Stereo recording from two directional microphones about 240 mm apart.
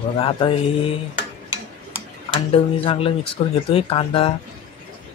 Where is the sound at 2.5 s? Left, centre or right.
Left.